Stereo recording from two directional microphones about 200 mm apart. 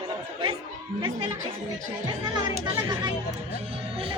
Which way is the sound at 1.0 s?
25° right (ahead or behind).